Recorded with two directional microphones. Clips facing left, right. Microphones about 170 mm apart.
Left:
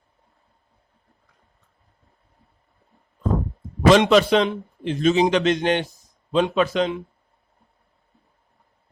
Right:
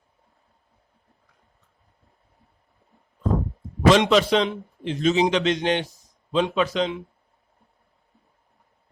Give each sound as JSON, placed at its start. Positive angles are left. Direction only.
{"t": 3.8, "sound": "a man's voice", "side_deg": 55}